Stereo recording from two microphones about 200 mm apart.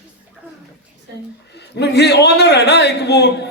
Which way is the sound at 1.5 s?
55° left (ahead or behind).